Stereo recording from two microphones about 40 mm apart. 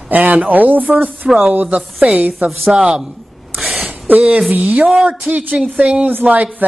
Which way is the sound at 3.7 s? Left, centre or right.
Right.